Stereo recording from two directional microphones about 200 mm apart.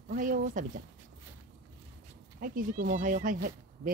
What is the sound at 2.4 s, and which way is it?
Speech, 45° right (ahead or behind).